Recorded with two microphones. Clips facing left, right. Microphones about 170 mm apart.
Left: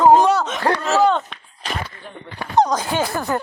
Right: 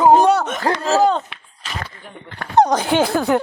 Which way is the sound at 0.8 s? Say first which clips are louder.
Right 2 dB; 35° right (ahead or behind).